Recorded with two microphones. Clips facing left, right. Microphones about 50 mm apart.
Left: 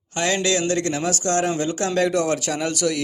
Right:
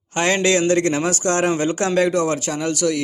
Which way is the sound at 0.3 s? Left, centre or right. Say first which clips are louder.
Right 6 dB; right.